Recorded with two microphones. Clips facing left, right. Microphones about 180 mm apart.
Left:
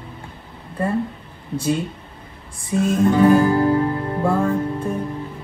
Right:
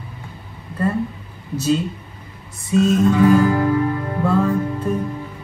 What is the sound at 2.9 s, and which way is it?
Music, 25° left (ahead or behind).